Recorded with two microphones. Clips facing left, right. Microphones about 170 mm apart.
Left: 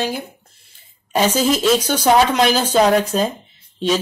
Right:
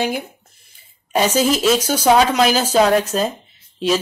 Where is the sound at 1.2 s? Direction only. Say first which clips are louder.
Even; 10° right (ahead or behind).